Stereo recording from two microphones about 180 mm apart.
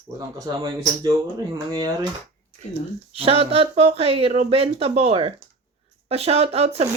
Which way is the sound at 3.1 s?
30° right (ahead or behind).